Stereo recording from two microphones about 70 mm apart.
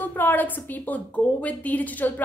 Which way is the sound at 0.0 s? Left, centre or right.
Left.